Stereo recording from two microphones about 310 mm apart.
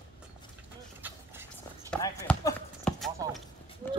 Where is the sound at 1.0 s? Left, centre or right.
Centre.